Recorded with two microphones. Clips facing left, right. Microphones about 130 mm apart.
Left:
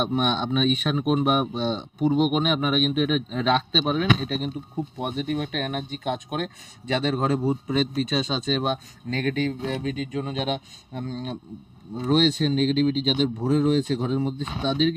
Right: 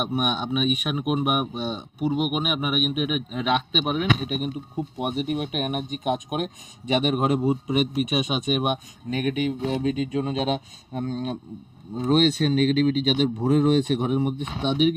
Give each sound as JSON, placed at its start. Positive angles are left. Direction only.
{"t": 0.0, "sound": "speech", "side_deg": -10}
{"t": 12.5, "sound": "speech", "side_deg": -60}
{"t": 13.8, "sound": "speech", "side_deg": -20}